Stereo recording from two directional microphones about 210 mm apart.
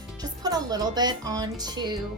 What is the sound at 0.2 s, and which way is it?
Speech, 20° right (ahead or behind).